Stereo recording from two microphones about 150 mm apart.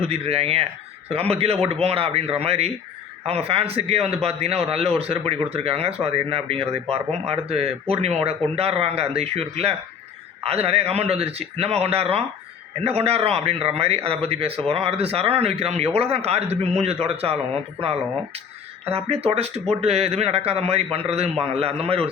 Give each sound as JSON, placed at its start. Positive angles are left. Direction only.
{"t": 0.0, "sound": "a man's voice", "side_deg": -40}